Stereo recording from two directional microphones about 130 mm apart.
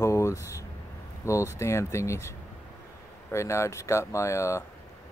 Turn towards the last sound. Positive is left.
turn(degrees=20)  # may be behind; listen again after turning